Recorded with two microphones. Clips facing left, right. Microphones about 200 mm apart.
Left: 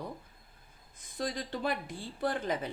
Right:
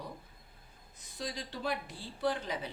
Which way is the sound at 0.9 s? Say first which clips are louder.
Left 5 dB; 50° left (ahead or behind).